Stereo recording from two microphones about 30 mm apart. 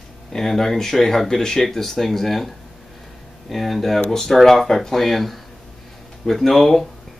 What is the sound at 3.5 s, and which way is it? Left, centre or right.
Speech, centre.